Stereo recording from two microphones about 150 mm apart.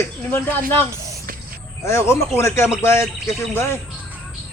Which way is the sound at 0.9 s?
20° right (ahead or behind).